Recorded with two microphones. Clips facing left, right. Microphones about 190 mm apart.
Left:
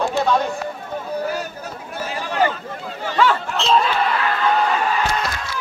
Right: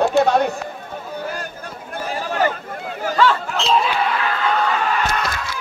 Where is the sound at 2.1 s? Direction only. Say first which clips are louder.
Even; 40° right (ahead or behind).